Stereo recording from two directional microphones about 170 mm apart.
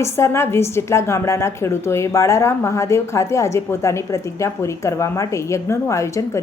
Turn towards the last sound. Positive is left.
turn(degrees=15)  # may be behind; listen again after turning